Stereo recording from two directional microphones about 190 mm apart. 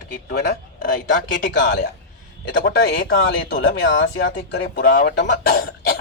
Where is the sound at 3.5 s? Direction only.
85° left; by 6.0 s 55° left (ahead or behind).